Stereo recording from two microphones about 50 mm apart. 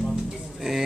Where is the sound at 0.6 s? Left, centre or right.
Centre.